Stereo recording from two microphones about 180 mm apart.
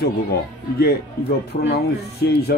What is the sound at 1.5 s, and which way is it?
Speech, 70° left (ahead or behind).